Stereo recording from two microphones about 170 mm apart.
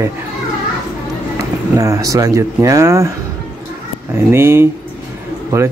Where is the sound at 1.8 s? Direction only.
20° right (ahead or behind).